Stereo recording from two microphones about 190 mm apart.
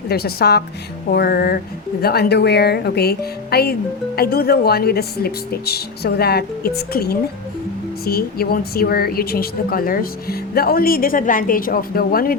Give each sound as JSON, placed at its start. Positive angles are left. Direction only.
{"t": 0.1, "sound": "a woman's voice", "side_deg": 55}